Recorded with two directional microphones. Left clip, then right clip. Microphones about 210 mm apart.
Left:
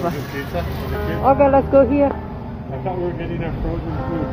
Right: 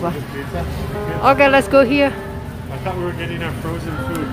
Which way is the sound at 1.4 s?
70° right (ahead or behind).